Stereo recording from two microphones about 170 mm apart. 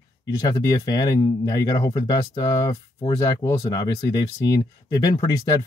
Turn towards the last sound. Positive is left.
turn(degrees=20)  # may be behind; listen again after turning